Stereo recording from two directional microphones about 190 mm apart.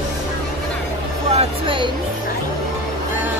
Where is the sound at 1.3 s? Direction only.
25° right (ahead or behind).